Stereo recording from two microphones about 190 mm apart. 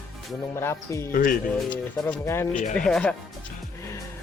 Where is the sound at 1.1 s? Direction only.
45° left (ahead or behind).